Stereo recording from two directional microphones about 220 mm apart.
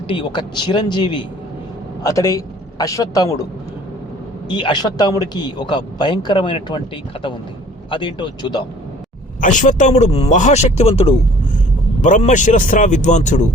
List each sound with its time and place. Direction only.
0.1 s a man's voice: 25° left (ahead or behind)
4.4 s a man's voice: 20° left (ahead or behind)
9.4 s speech: 35° left (ahead or behind)